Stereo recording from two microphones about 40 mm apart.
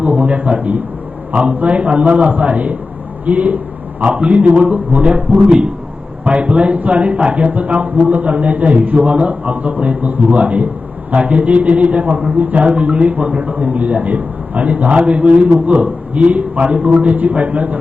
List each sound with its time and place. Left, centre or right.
0.0 s a man's voice: right